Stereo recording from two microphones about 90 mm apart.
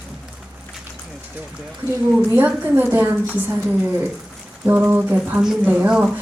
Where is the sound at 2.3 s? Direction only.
20° right (ahead or behind).